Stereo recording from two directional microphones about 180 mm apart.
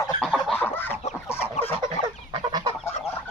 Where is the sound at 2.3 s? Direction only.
20° right (ahead or behind).